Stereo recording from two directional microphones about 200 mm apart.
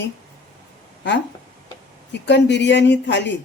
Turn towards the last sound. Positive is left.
turn(degrees=60)  # may be behind; listen again after turning